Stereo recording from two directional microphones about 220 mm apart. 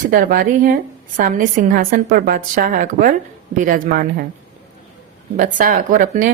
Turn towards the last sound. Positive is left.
turn(degrees=-35)  # may be behind; listen again after turning